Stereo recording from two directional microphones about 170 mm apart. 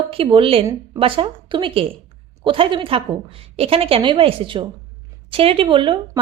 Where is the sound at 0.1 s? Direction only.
30° right (ahead or behind).